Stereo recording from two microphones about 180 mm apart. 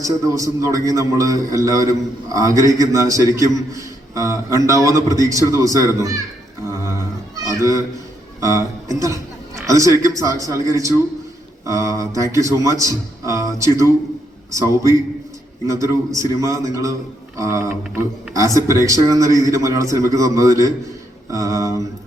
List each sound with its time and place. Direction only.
0.0 s a man's voice: 20° right (ahead or behind)
6.7 s cat: 15° right (ahead or behind)
8.4 s a man's voice: 20° right (ahead or behind)